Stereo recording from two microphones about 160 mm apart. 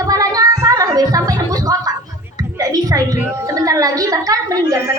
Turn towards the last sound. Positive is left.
turn(degrees=-20)  # may be behind; listen again after turning